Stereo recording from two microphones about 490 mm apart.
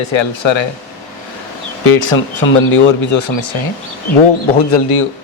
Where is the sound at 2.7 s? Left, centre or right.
Left.